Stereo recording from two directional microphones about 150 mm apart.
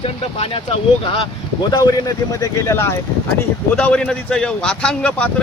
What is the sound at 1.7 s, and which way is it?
Speech, 25° left (ahead or behind).